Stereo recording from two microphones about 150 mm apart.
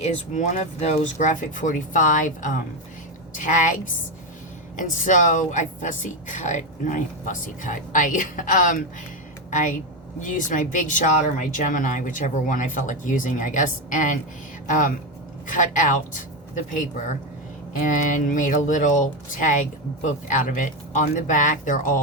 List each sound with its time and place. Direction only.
0.0 s a woman's voice: 50° left (ahead or behind)
4.8 s a woman's voice: 60° left (ahead or behind)